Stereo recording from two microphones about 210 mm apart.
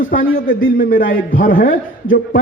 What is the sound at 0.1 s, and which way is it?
A man's voice, 40° left (ahead or behind).